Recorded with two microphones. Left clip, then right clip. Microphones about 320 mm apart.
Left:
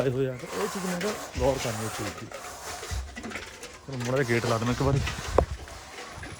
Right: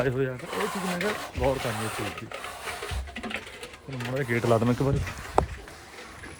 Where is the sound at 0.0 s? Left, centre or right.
Centre.